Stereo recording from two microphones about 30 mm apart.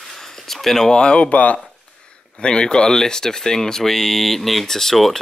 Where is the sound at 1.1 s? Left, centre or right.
Left.